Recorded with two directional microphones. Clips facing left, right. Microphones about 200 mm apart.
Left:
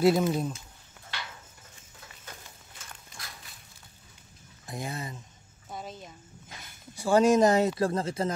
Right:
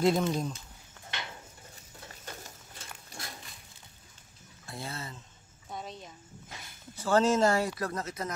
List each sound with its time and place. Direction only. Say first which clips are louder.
0.0 s speech: left 3 dB; 5° left (ahead or behind)
4.6 s speech: left 4 dB; 15° left (ahead or behind)
5.7 s a sound: left 1 dB; centre (ahead or behind)
7.0 s speech: left 4 dB; 15° left (ahead or behind); by 8.3 s 30° left (ahead or behind)